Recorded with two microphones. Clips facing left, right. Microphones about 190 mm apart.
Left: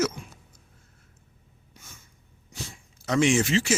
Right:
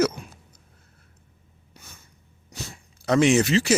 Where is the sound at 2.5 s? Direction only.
65° right (ahead or behind).